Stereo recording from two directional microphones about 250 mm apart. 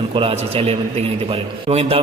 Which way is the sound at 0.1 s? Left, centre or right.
Right.